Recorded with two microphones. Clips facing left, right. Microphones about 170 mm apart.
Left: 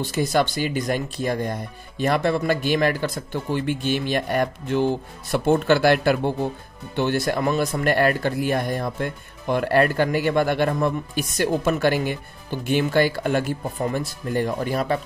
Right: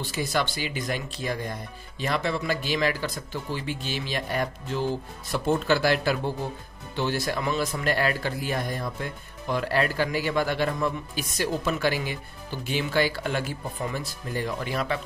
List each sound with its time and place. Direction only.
0.0 s a man's voice: 45° left (ahead or behind)